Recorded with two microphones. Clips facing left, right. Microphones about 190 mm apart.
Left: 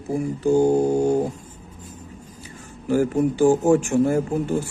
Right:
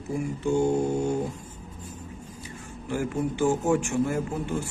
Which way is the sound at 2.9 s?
40° left (ahead or behind).